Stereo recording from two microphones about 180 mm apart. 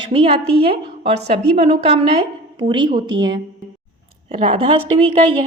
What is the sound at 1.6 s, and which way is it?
Speech, 35° right (ahead or behind).